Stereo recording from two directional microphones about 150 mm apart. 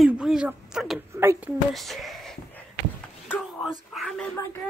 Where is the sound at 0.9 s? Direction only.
15° right (ahead or behind).